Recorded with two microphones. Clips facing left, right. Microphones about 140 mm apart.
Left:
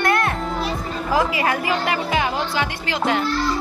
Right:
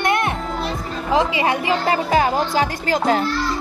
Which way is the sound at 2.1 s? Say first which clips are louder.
Right 4 dB; 40° right (ahead or behind).